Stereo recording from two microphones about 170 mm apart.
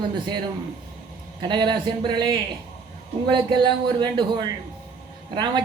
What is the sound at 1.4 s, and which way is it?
Speech, 25° right (ahead or behind).